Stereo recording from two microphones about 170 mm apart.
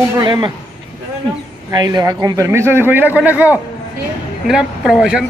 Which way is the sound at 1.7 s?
25° right (ahead or behind).